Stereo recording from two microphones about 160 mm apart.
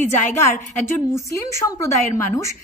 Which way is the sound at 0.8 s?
20° left (ahead or behind).